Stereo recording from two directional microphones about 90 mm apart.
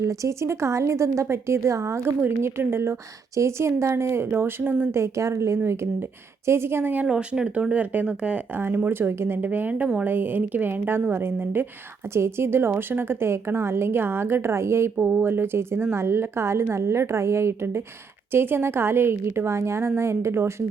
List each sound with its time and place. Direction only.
0.0 s speech: 35° right (ahead or behind)
14.9 s speech: 15° right (ahead or behind)